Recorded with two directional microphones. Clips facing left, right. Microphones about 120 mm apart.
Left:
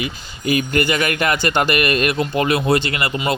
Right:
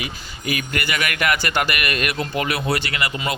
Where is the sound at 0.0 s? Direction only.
30° left (ahead or behind).